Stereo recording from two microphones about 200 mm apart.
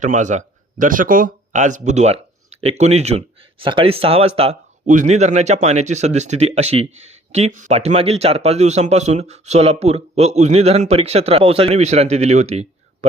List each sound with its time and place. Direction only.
0.0 s a man's voice: 35° right (ahead or behind)